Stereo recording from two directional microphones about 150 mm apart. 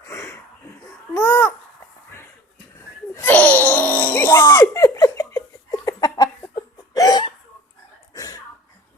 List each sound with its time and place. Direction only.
0.0 s wheeze: 20° left (ahead or behind)
1.1 s babbling: 15° left (ahead or behind)
2.7 s a sound: 20° left (ahead or behind)
5.8 s chicken: 25° left (ahead or behind)
6.6 s hiccup: 25° left (ahead or behind)
8.1 s a sound: 25° left (ahead or behind)